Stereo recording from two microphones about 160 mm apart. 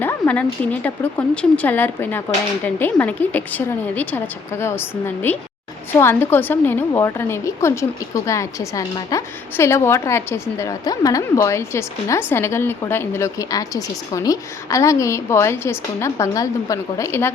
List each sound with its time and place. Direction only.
0.0 s a woman's voice: 10° left (ahead or behind)